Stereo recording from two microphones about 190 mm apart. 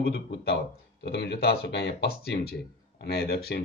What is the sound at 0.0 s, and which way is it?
Speech, 60° left (ahead or behind).